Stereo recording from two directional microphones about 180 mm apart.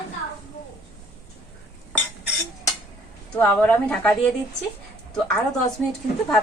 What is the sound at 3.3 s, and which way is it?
Speech, 10° left (ahead or behind).